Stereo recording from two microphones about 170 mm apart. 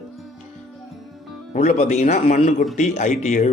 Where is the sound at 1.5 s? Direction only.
45° left (ahead or behind).